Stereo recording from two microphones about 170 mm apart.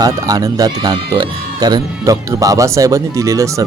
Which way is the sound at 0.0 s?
20° right (ahead or behind).